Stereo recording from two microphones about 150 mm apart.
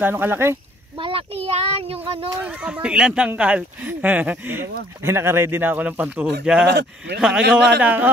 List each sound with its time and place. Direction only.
0.0 s speech: 15° right (ahead or behind)
0.9 s child singing: 35° right (ahead or behind)
2.0 s speech: 10° right (ahead or behind)